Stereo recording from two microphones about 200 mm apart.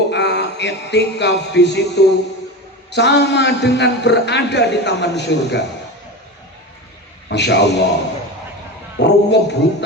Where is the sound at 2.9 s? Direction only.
60° left (ahead or behind).